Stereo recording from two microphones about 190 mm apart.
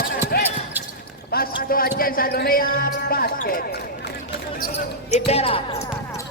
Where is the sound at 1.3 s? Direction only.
50° left (ahead or behind).